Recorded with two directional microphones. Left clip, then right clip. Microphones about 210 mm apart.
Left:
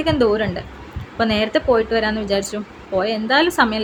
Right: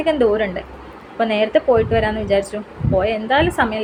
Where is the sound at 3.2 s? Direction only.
20° left (ahead or behind).